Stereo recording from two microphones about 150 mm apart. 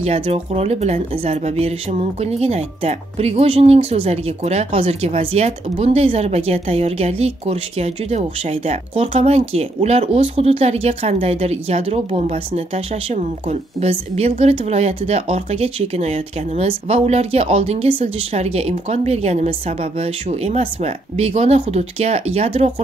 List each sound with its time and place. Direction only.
0.0 s speech: 45° right (ahead or behind)